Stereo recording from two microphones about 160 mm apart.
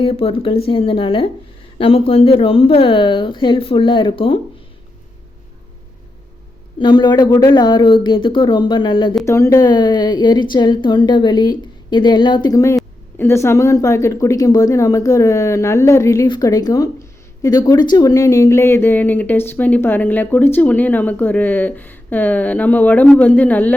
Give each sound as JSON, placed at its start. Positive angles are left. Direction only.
{"t": 0.0, "sound": "speech", "side_deg": 40}
{"t": 6.7, "sound": "a woman's voice", "side_deg": 25}
{"t": 9.2, "sound": "a woman's voice", "side_deg": 20}